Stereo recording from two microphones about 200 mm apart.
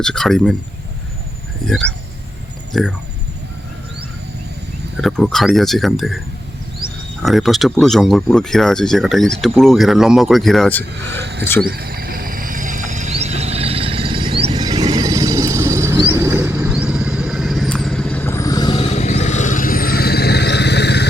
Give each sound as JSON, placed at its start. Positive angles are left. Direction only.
{"t": 0.0, "sound": "speech", "side_deg": 5}
{"t": 1.6, "sound": "speech", "side_deg": 0}
{"t": 4.9, "sound": "speech", "side_deg": 0}
{"t": 7.2, "sound": "speech", "side_deg": 0}
{"t": 11.2, "sound": "speech", "side_deg": -60}
{"t": 11.6, "sound": "a sound", "side_deg": -50}